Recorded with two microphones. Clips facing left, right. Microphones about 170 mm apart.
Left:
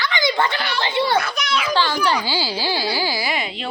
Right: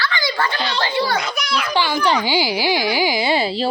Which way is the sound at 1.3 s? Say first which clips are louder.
Even; centre (ahead or behind).